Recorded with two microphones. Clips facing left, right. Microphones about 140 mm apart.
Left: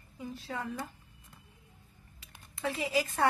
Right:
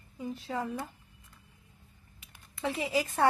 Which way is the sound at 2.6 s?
25° right (ahead or behind).